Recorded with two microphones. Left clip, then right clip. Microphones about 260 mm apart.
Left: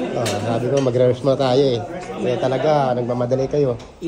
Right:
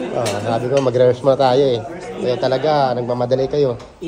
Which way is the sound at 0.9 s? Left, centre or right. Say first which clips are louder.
Right 4 dB; centre.